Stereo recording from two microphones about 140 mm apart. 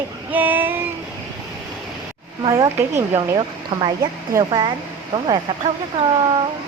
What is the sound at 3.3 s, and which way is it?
Speech, 35° right (ahead or behind).